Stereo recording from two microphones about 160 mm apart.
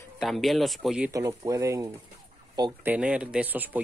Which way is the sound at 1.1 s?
20° right (ahead or behind).